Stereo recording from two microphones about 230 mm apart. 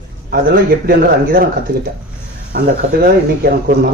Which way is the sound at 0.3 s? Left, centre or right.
Right.